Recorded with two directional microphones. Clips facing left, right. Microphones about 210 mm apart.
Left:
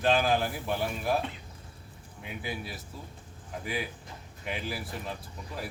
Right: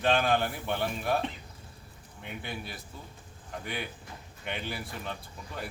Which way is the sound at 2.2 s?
Centre (ahead or behind).